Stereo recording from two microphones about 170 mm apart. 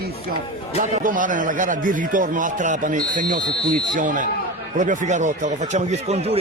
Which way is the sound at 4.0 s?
50° right (ahead or behind).